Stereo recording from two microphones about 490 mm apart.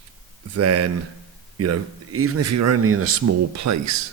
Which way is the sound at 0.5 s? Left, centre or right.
Right.